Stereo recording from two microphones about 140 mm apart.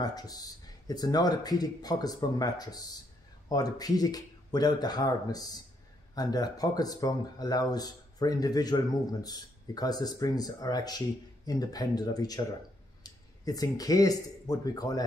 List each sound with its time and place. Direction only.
0.0 s speech: 25° left (ahead or behind)